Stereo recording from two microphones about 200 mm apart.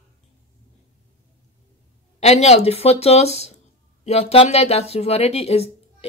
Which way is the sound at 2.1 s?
35° left (ahead or behind).